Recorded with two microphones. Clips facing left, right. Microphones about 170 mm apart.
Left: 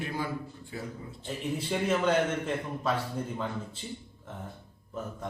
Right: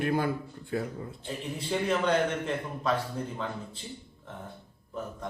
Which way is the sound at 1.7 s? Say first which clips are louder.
Right 1 dB; 5° left (ahead or behind).